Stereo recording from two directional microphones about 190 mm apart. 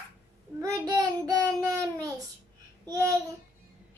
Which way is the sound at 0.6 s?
15° right (ahead or behind).